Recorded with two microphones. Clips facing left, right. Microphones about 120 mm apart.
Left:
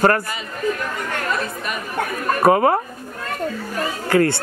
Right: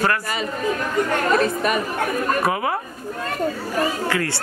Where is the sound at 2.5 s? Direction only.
45° left (ahead or behind).